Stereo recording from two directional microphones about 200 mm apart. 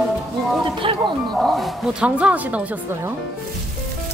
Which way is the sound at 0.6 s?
25° right (ahead or behind).